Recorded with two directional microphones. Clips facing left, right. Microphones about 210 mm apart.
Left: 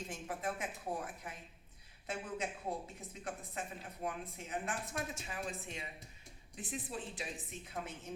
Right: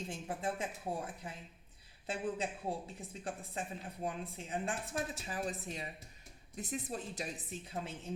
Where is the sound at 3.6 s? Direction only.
30° right (ahead or behind).